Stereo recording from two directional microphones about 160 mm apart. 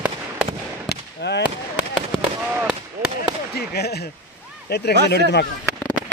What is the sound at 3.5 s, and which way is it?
Speech, 90° left.